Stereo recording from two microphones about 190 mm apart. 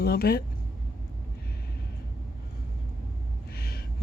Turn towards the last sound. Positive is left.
turn(degrees=55)  # may be behind; listen again after turning